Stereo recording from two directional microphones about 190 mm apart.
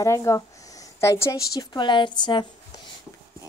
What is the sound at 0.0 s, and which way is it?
A woman's voice, 15° left (ahead or behind).